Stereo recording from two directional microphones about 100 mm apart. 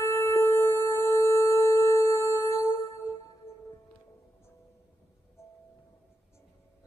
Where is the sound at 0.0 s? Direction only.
25° left (ahead or behind).